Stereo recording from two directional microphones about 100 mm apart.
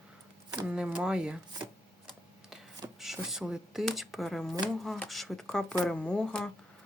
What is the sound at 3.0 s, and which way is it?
Speech, 5° right (ahead or behind).